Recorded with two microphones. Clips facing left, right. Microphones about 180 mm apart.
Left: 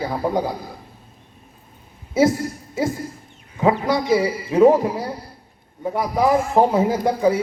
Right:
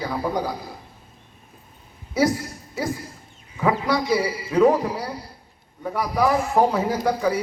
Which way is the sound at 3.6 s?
25° left (ahead or behind).